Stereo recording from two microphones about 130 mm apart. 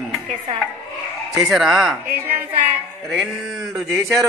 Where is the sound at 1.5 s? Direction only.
5° right (ahead or behind).